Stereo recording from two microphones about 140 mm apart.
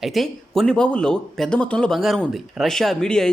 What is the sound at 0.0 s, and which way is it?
Speech, centre (ahead or behind).